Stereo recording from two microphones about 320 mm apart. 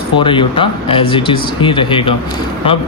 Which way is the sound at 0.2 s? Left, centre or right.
Centre.